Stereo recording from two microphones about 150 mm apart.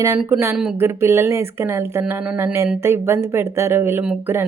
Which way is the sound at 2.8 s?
15° right (ahead or behind).